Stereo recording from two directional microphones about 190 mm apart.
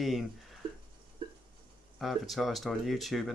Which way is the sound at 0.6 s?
25° right (ahead or behind).